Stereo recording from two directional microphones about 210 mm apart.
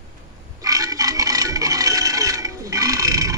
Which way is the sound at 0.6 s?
15° right (ahead or behind).